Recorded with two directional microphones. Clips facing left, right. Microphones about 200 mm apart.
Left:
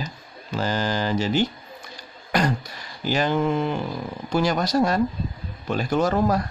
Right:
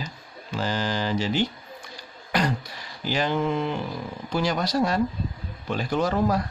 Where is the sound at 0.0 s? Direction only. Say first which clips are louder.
Left 2 dB; 45° left (ahead or behind).